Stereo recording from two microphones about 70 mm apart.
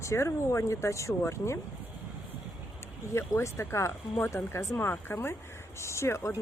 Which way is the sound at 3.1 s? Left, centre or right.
Left.